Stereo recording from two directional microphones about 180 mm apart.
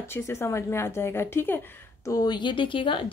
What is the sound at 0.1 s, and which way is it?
A woman's voice, 15° left (ahead or behind).